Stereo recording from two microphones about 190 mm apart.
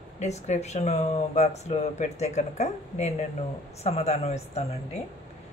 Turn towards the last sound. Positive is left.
turn(degrees=35)  # may be behind; listen again after turning